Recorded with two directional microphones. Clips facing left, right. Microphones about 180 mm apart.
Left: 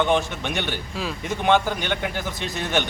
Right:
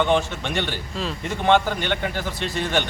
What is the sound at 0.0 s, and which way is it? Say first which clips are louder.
A man's voice: right 1 dB; 10° left (ahead or behind).